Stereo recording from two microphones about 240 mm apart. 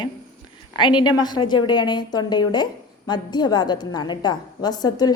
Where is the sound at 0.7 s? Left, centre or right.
Centre.